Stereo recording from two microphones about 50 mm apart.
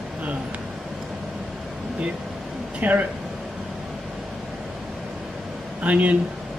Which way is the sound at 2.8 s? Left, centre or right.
Right.